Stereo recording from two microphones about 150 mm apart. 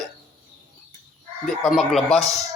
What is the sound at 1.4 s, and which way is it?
Speech, centre (ahead or behind).